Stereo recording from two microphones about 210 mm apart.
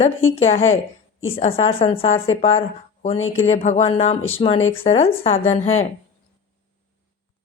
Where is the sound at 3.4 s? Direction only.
30° left (ahead or behind).